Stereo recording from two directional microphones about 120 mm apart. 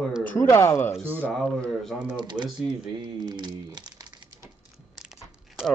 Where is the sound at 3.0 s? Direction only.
35° right (ahead or behind).